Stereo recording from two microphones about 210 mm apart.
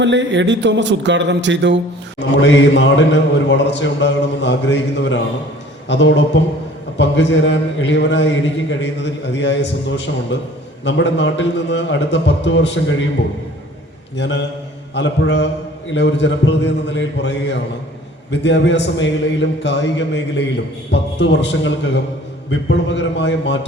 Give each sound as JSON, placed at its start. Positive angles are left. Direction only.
{"t": 0.0, "sound": "a man's voice", "side_deg": -60}
{"t": 2.1, "sound": "a man's voice", "side_deg": 55}
{"t": 14.2, "sound": "a man's voice", "side_deg": 55}
{"t": 20.9, "sound": "a man's voice", "side_deg": 55}